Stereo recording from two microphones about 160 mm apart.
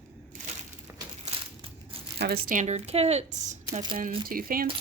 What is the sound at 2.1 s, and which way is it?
Speech, 90° right.